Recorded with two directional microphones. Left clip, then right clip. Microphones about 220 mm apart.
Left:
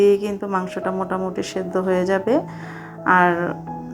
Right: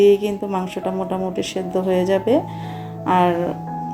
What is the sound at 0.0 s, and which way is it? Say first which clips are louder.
Speech: right 2 dB; 5° right (ahead or behind).